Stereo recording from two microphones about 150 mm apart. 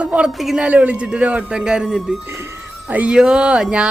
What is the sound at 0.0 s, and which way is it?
Speech, 5° right (ahead or behind).